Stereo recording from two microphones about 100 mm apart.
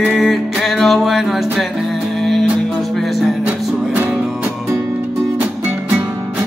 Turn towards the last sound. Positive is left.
turn(degrees=-20)  # may be behind; listen again after turning